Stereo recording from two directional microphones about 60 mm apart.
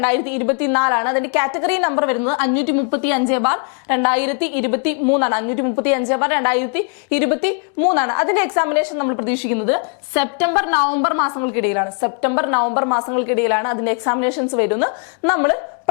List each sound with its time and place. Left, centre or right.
0.0 s a woman's voice: left